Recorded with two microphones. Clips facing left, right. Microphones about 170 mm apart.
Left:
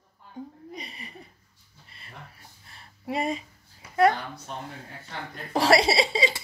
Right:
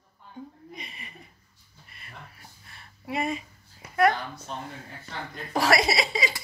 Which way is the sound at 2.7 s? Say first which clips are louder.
Left 2 dB; 35° left (ahead or behind).